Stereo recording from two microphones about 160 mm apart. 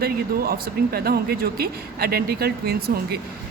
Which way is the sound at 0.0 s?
70° right (ahead or behind).